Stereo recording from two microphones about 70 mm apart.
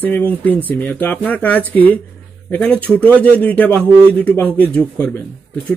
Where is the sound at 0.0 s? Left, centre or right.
Left.